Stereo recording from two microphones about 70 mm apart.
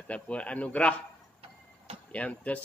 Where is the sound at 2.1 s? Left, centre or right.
Centre.